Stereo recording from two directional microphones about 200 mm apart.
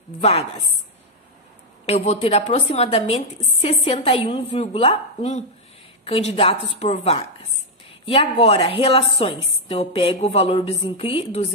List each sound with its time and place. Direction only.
0.2 s a woman's voice: 30° left (ahead or behind)
1.9 s a woman's voice: 30° left (ahead or behind)